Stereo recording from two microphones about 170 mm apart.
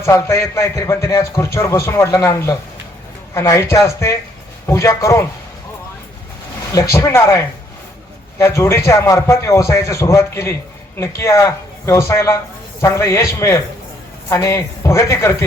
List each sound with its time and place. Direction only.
0.0 s speech: 15° left (ahead or behind)
6.7 s speech: 15° left (ahead or behind)